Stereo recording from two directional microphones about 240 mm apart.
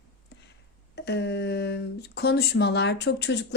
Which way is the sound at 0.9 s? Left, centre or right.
Left.